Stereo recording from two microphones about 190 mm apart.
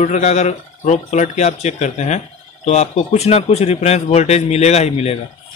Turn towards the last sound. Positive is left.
turn(degrees=35)  # may be behind; listen again after turning